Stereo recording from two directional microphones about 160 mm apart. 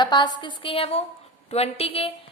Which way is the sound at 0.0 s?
30° left (ahead or behind).